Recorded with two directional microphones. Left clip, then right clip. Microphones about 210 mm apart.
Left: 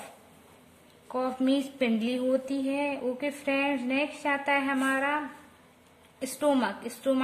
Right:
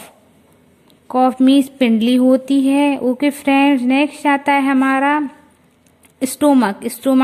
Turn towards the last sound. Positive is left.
turn(degrees=-40)  # may be behind; listen again after turning